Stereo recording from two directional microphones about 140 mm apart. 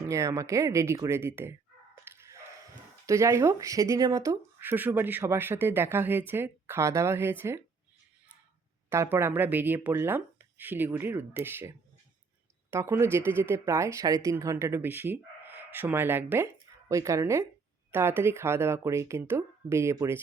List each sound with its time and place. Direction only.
0.1 s speech: 20° right (ahead or behind)
2.0 s a sound: 20° right (ahead or behind)
3.1 s speech: 20° right (ahead or behind)
8.9 s speech: 20° right (ahead or behind)
12.7 s speech: 20° right (ahead or behind)